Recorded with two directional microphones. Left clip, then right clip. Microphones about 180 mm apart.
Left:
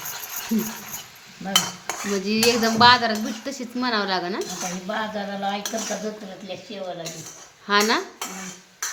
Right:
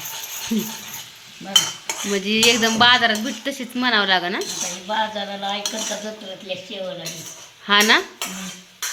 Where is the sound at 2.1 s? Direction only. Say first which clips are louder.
Right 4 dB; 5° right (ahead or behind).